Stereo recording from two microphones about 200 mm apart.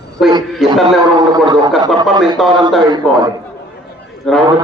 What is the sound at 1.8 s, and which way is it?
Speech, 20° right (ahead or behind).